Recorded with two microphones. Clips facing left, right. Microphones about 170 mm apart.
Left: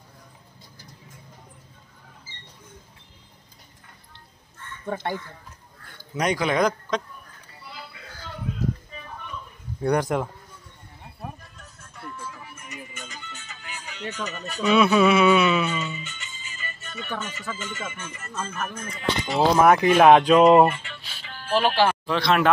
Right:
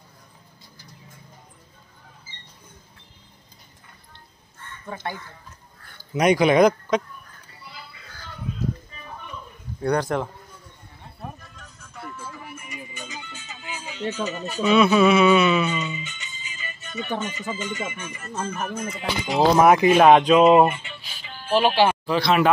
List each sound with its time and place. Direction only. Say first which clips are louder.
5.9 s speech: right 6 dB; 10° right (ahead or behind)
9.8 s speech: even; 15° left (ahead or behind)
12.2 s music: right 2 dB; 5° right (ahead or behind)
14.6 s speech: right 1 dB; centre (ahead or behind)
15.7 s speech: right 2 dB; 15° right (ahead or behind)